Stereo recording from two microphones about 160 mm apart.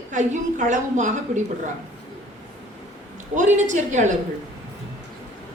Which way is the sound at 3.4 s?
50° right (ahead or behind).